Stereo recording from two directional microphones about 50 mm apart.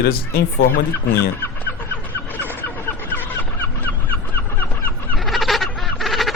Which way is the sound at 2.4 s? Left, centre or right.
Left.